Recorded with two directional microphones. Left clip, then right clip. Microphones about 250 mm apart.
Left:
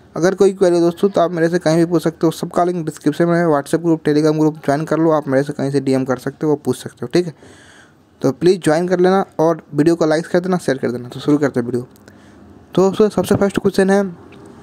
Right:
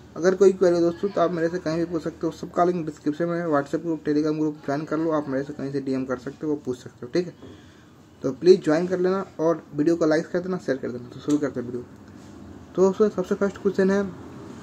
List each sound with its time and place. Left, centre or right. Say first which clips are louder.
0.1 s speech: left 4 dB; left
12.7 s speech: left 6 dB; left